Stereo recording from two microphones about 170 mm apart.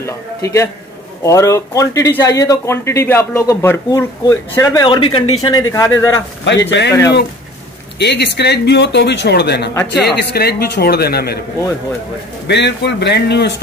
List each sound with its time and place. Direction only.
0.0 s a man's voice: 15° left (ahead or behind)
4.8 s a man's voice: 30° left (ahead or behind)
8.0 s a man's voice: 85° left; by 11.3 s 70° left (ahead or behind)
12.4 s speech: 90° left